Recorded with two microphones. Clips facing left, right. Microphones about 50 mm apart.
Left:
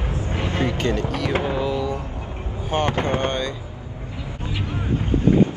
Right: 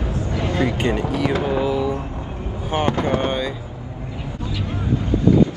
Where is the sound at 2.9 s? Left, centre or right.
Left.